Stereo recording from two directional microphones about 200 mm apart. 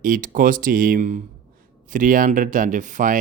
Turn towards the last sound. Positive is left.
turn(degrees=-40)  # may be behind; listen again after turning